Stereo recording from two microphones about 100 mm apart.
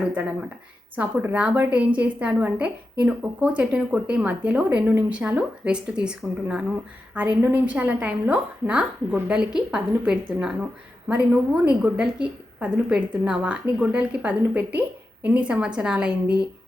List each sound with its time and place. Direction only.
0.1 s a woman's voice: 15° right (ahead or behind)